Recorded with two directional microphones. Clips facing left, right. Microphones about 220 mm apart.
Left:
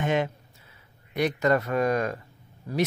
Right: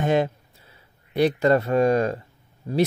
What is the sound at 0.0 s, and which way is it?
Speech, 35° right (ahead or behind).